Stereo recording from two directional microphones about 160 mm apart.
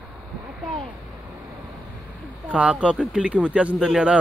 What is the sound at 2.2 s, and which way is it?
Speech, 10° right (ahead or behind).